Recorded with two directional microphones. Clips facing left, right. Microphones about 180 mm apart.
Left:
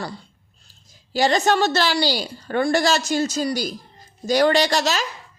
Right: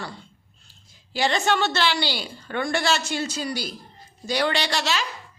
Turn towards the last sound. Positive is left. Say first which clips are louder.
# left 6 dB
turn(degrees=40)  # may be behind; listen again after turning